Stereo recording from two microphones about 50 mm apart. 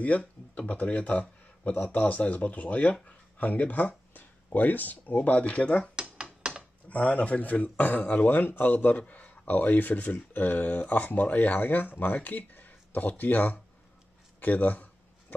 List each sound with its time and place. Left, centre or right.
0.6 s speech: left
5.9 s dishes: right
6.9 s speech: left
14.4 s a sound: left